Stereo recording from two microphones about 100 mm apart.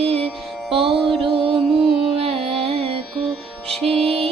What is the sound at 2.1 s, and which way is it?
Carnatic music, 75° right (ahead or behind).